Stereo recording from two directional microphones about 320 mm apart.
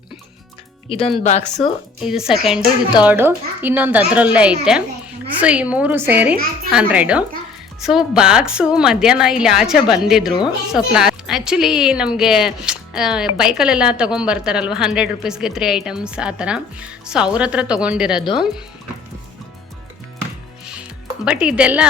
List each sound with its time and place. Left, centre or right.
0.9 s a woman's voice: centre
2.0 s speech: centre
21.2 s speech: centre